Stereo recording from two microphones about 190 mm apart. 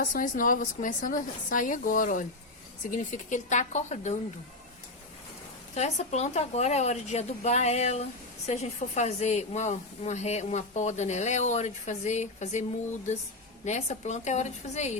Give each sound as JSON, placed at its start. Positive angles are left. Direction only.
{"t": 0.0, "sound": "a woman's voice", "side_deg": 45}
{"t": 5.7, "sound": "speech", "side_deg": 35}
{"t": 13.7, "sound": "speech", "side_deg": 35}